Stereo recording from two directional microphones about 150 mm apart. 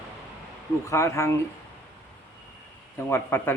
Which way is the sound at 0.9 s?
20° left (ahead or behind).